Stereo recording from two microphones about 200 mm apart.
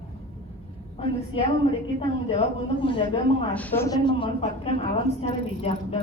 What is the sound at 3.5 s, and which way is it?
A woman's voice, 10° left (ahead or behind).